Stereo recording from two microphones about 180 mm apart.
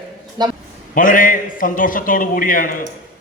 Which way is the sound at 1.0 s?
50° left (ahead or behind).